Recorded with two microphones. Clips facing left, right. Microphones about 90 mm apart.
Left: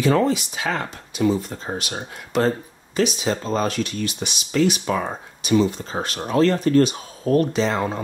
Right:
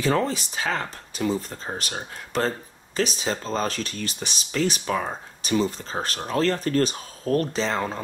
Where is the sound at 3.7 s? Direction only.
35° right (ahead or behind).